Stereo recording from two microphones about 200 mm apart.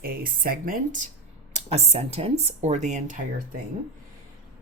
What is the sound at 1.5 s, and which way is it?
Speech, 30° right (ahead or behind).